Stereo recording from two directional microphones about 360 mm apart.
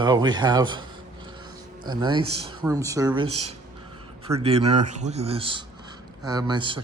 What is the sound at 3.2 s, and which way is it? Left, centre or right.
Speech, right.